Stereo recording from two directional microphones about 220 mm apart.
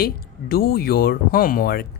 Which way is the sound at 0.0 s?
45° left (ahead or behind).